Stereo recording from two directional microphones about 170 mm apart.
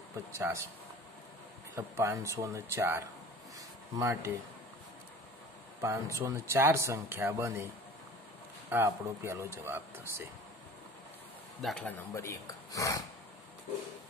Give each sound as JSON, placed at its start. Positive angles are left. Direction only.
{"t": 0.4, "sound": "speech", "side_deg": -15}
{"t": 1.8, "sound": "speech", "side_deg": -15}
{"t": 3.5, "sound": "a sound", "side_deg": -20}
{"t": 5.8, "sound": "speech", "side_deg": -15}
{"t": 11.6, "sound": "speech", "side_deg": 5}